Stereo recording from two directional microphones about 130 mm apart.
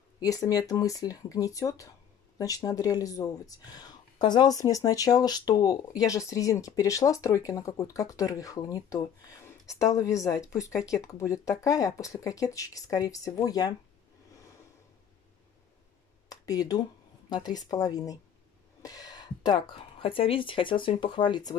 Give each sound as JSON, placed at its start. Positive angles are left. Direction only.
{"t": 0.2, "sound": "speech", "side_deg": 30}
{"t": 16.3, "sound": "a sound", "side_deg": 30}
{"t": 17.3, "sound": "speech", "side_deg": 30}